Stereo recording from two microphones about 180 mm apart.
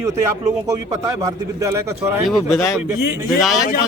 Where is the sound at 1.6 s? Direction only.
20° right (ahead or behind).